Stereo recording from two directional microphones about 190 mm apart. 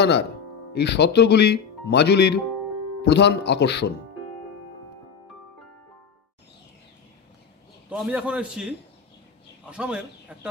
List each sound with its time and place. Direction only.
0.0 s speech: 60° left (ahead or behind)
7.9 s a man's voice: 5° right (ahead or behind)